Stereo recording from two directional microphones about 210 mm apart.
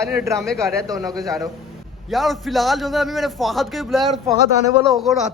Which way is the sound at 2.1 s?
Centre (ahead or behind).